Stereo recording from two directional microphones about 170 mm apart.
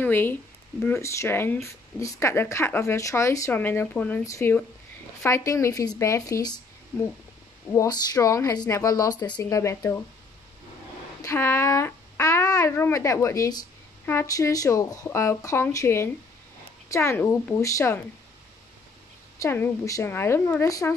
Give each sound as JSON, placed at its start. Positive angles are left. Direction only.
{"t": 0.0, "sound": "speech", "side_deg": 10}
{"t": 7.7, "sound": "speech", "side_deg": 20}
{"t": 11.2, "sound": "speech", "side_deg": 15}
{"t": 19.4, "sound": "speech", "side_deg": 15}